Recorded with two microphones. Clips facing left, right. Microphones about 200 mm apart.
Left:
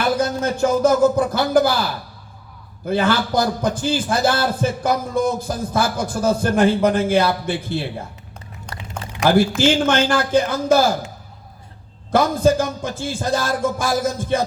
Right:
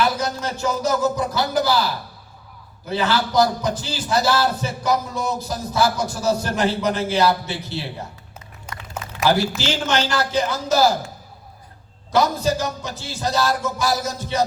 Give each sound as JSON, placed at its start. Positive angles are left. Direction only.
{"t": 0.0, "sound": "a man's voice", "side_deg": 50}
{"t": 2.8, "sound": "a man's voice", "side_deg": 50}
{"t": 8.7, "sound": "a sound", "side_deg": -5}
{"t": 9.6, "sound": "a man's voice", "side_deg": 50}
{"t": 12.1, "sound": "a man's voice", "side_deg": 50}